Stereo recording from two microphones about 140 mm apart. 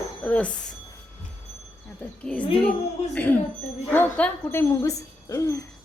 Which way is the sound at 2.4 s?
40° left (ahead or behind).